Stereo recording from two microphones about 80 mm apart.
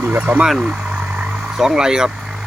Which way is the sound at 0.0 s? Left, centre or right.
Right.